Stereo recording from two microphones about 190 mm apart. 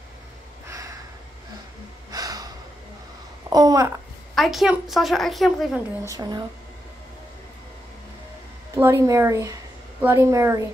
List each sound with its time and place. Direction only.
0.7 s a sound: 20° right (ahead or behind)
2.0 s gasp: 20° right (ahead or behind)
3.4 s babbling: 20° right (ahead or behind)
4.4 s a woman's voice: centre (ahead or behind)
6.0 s speech: 20° right (ahead or behind)
8.7 s speech: 15° right (ahead or behind)